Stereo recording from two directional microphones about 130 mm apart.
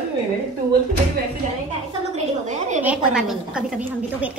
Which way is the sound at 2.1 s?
70° right (ahead or behind).